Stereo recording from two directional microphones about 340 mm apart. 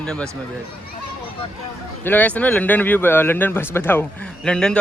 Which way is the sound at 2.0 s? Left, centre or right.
Centre.